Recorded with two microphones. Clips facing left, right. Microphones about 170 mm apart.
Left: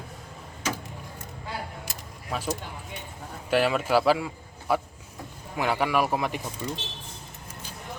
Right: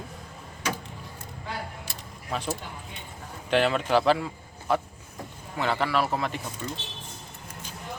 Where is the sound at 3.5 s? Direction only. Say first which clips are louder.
Even; 5° left (ahead or behind).